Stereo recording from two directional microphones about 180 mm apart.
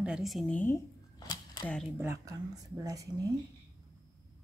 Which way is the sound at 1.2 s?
20° left (ahead or behind).